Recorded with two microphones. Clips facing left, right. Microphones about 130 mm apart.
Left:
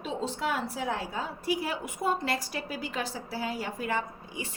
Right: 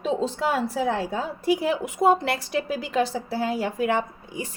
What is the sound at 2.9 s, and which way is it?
A woman's voice, 90° right.